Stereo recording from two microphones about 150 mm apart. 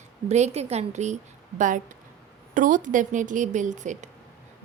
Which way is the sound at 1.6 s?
60° right (ahead or behind).